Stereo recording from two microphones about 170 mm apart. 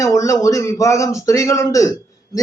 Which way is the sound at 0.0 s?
20° left (ahead or behind).